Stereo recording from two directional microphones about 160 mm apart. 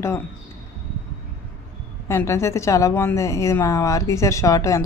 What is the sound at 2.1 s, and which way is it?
A woman's voice, 15° left (ahead or behind).